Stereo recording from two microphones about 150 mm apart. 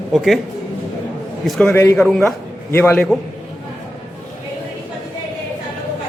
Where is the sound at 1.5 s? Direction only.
10° left (ahead or behind).